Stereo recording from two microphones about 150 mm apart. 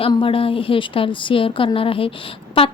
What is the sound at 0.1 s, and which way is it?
A woman's voice, 35° left (ahead or behind).